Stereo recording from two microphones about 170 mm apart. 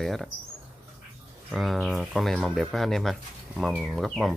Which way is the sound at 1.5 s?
Centre (ahead or behind).